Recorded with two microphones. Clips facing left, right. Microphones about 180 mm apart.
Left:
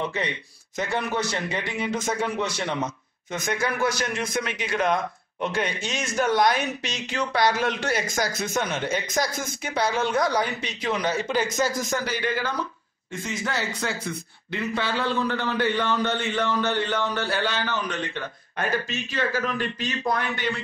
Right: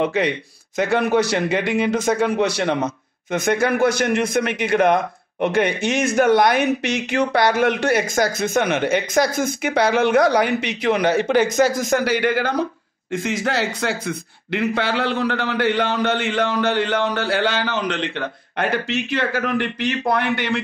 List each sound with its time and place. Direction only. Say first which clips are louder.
0.0 s a man's voice: right 9 dB; 75° right (ahead or behind)
13.1 s a man's voice: right 8 dB; 90° right; by 20.6 s 70° right (ahead or behind)